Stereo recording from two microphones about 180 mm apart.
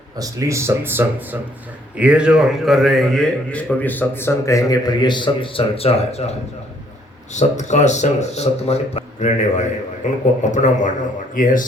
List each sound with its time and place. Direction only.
0.2 s a man's voice: 15° right (ahead or behind); by 6.3 s 35° left (ahead or behind)
7.3 s speech: 40° left (ahead or behind)